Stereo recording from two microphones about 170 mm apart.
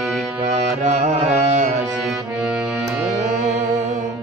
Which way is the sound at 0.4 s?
40° right (ahead or behind).